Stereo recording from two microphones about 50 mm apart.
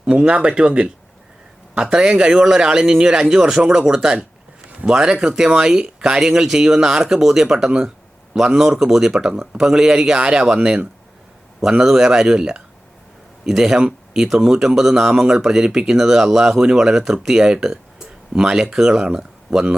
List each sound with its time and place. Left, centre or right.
0.1 s speech: right